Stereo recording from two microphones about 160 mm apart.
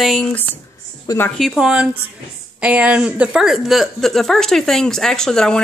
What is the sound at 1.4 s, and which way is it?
Speech, centre (ahead or behind).